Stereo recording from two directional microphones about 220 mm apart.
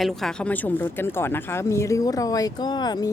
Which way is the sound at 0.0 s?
Centre (ahead or behind).